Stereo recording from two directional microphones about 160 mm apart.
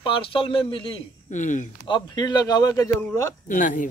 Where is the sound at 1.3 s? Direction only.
50° left (ahead or behind).